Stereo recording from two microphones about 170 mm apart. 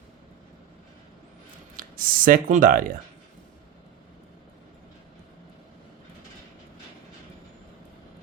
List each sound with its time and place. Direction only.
1.7 s speech: 55° right (ahead or behind)